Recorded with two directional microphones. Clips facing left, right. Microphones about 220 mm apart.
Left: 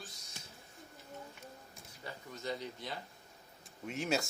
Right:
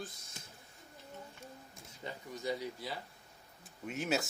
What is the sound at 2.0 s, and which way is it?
Speech, 15° right (ahead or behind).